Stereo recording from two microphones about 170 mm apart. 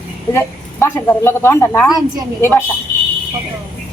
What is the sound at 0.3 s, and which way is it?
A woman's voice, 15° left (ahead or behind).